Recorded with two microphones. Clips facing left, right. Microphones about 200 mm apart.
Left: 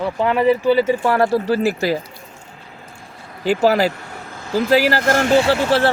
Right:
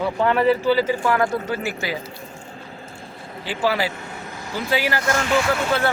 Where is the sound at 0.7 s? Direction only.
25° left (ahead or behind).